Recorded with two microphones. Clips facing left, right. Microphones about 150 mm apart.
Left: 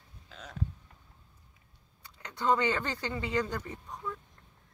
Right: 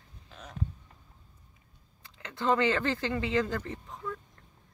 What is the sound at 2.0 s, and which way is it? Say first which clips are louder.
Speech: right 1 dB; 90° right.